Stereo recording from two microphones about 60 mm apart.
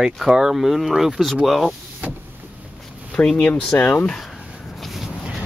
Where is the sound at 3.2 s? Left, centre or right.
Left.